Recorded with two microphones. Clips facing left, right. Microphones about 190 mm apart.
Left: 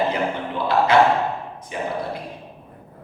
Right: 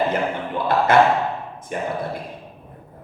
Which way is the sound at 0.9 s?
50° right (ahead or behind).